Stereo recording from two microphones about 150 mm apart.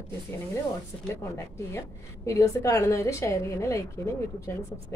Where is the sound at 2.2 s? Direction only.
20° left (ahead or behind).